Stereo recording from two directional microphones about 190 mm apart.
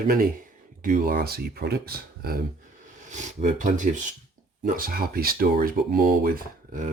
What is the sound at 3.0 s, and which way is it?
Speech, 40° right (ahead or behind).